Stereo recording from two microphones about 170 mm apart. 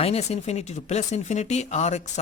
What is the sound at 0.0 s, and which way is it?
Speech, 40° left (ahead or behind).